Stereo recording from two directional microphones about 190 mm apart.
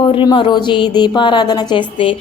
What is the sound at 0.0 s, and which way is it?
A woman's voice, 25° left (ahead or behind).